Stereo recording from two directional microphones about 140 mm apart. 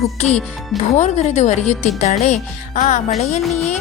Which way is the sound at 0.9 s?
55° left (ahead or behind).